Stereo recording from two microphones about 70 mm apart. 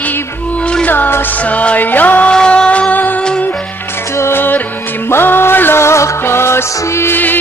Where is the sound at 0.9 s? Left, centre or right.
Left.